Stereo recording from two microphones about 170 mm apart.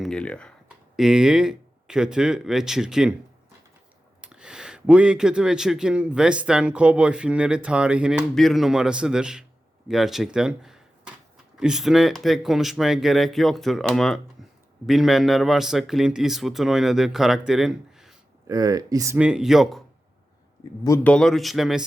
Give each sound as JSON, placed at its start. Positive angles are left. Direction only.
{"t": 0.0, "sound": "speech", "side_deg": 5}
{"t": 4.2, "sound": "speech", "side_deg": -5}
{"t": 18.4, "sound": "speech", "side_deg": -20}
{"t": 19.1, "sound": "speech", "side_deg": -5}
{"t": 21.0, "sound": "speech", "side_deg": 5}